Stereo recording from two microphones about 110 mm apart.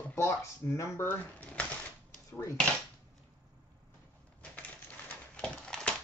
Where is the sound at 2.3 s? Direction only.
25° left (ahead or behind).